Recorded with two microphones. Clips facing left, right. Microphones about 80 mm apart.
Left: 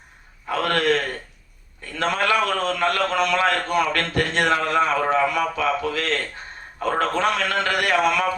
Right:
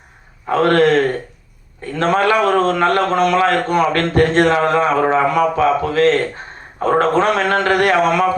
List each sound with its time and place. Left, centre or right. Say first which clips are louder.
0.4 s a man's voice: right 8 dB; right
1.8 s a sound: right 7 dB; right
3.9 s a man's voice: right 9 dB; right